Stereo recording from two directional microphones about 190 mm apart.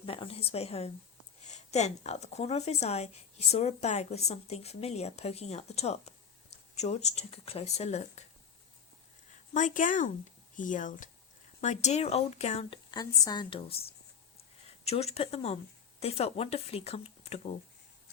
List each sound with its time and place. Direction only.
0.0 s a sound: 30° left (ahead or behind)
1.5 s speech: 35° left (ahead or behind)
9.5 s speech: 40° left (ahead or behind)
12.9 s a woman's voice: 20° left (ahead or behind)
14.8 s speech: 35° left (ahead or behind)